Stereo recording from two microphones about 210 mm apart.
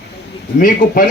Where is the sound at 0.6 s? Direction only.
40° left (ahead or behind).